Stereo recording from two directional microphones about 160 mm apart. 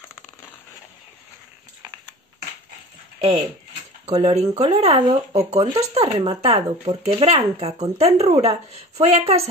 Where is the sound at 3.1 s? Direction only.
40° right (ahead or behind).